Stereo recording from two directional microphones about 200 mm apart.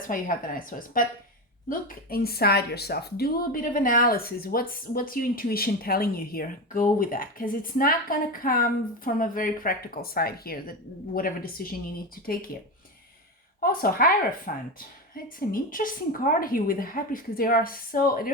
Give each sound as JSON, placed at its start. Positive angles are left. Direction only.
{"t": 0.1, "sound": "speech", "side_deg": 45}
{"t": 13.6, "sound": "speech", "side_deg": 45}